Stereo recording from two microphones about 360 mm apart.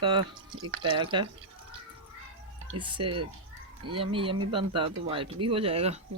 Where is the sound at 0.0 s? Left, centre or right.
Centre.